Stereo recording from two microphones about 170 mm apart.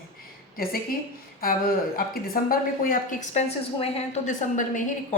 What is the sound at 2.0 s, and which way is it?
A woman's voice, 60° left (ahead or behind).